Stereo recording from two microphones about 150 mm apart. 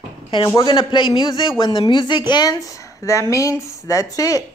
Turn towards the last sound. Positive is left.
turn(degrees=25)  # may be behind; listen again after turning